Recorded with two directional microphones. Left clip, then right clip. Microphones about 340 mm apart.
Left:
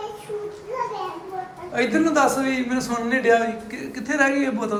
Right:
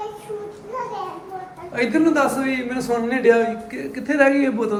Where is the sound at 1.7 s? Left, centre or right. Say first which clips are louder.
Right 1 dB; centre.